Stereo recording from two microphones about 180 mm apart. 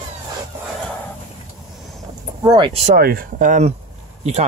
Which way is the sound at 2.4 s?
25° right (ahead or behind).